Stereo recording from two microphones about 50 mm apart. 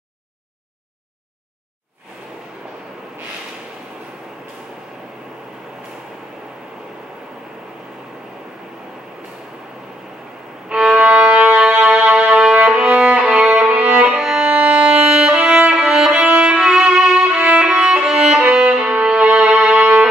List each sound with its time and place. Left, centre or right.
11.0 s music: right
12.8 s violin: centre
13.6 s violin: right
14.4 s violin: right; by 16.3 s centre
16.3 s music: right
16.6 s violin: centre
17.4 s violin: right
17.6 s music: centre
18.7 s violin: right
19.8 s music: centre